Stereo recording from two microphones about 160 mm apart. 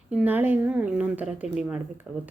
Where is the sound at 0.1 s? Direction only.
10° right (ahead or behind).